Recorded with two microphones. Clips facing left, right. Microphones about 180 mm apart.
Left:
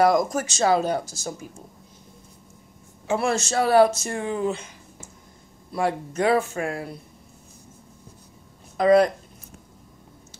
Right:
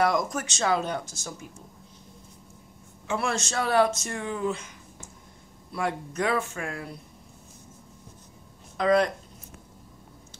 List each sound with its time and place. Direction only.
0.0 s speech: 40° left (ahead or behind)
3.1 s a man's voice: 30° left (ahead or behind)
5.8 s speech: 30° left (ahead or behind)
8.7 s speech: 40° left (ahead or behind)